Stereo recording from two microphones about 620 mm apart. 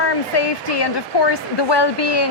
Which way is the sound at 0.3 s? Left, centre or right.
Left.